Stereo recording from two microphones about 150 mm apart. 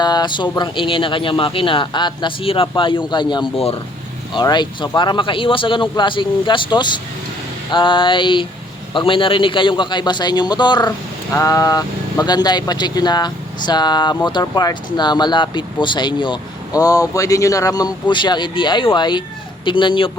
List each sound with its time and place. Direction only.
0.0 s a man's voice: 30° left (ahead or behind)